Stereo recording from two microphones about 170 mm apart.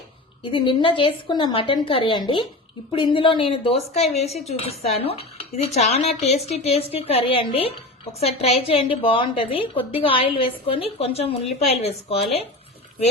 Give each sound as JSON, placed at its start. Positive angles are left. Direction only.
{"t": 0.5, "sound": "a woman's voice", "side_deg": 30}